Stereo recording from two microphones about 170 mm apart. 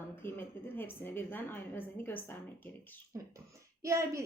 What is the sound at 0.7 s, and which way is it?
A woman's voice, 10° left (ahead or behind).